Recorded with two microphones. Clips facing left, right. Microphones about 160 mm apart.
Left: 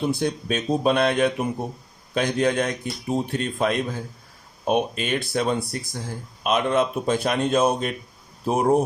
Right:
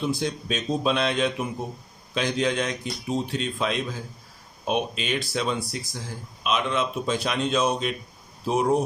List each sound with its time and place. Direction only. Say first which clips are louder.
0.0 s a man's voice: left 3 dB; 55° left (ahead or behind)